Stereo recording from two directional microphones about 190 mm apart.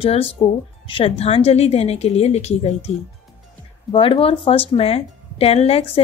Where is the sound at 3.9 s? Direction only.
30° left (ahead or behind).